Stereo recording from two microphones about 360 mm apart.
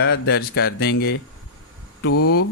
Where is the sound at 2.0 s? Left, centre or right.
Left.